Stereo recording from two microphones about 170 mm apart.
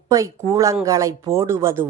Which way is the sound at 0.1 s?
20° right (ahead or behind).